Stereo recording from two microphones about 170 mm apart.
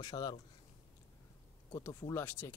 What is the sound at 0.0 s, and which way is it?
Speech, 25° left (ahead or behind).